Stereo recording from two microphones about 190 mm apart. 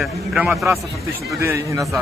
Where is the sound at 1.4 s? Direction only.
15° right (ahead or behind).